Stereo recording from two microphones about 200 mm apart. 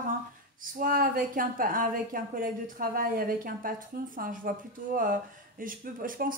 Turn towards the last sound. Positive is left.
turn(degrees=-45)  # may be behind; listen again after turning